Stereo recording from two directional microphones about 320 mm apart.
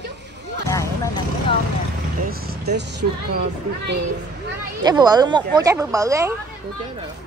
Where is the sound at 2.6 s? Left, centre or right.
Right.